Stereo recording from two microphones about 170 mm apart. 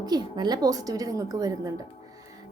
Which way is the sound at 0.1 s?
25° right (ahead or behind).